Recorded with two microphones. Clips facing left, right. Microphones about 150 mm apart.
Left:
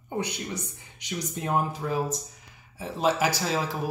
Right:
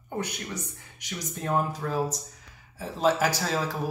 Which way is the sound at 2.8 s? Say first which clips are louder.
Right 1 dB; 10° left (ahead or behind).